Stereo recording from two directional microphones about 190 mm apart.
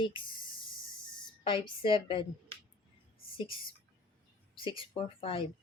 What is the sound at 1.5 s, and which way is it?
Speech, 25° left (ahead or behind).